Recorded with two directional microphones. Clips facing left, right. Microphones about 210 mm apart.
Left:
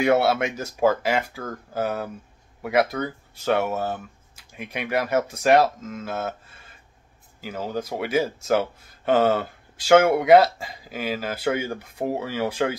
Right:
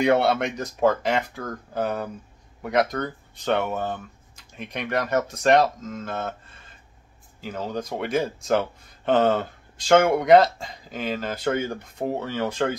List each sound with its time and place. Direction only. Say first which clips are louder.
0.0 s speech: even; 5° left (ahead or behind)
7.3 s speech: left 1 dB; 5° left (ahead or behind)